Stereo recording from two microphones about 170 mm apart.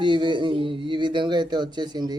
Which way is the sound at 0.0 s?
30° right (ahead or behind).